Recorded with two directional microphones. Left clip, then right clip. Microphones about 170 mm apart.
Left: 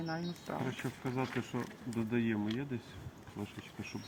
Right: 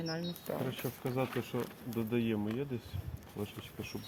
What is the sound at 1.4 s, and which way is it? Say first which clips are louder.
Speech: right 1 dB; 15° right (ahead or behind).